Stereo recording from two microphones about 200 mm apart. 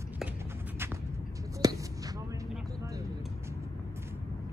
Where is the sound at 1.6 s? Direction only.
20° right (ahead or behind).